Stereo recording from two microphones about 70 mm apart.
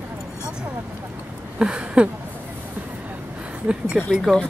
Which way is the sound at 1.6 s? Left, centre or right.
Centre.